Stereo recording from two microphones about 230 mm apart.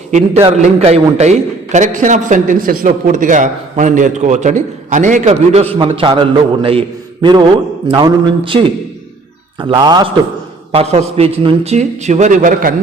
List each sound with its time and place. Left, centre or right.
0.4 s a man's voice: right